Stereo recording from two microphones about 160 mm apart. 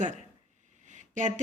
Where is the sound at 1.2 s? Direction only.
50° right (ahead or behind).